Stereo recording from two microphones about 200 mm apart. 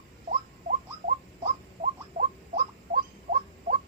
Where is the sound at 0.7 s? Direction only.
40° right (ahead or behind).